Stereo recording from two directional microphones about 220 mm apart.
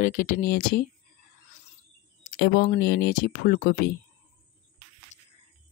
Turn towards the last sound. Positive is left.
turn(degrees=30)  # may be behind; listen again after turning